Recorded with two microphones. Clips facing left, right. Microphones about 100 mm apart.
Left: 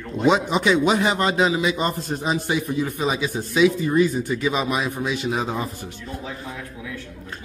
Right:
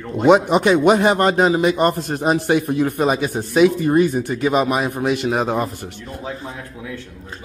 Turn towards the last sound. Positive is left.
turn(degrees=-65)  # may be behind; listen again after turning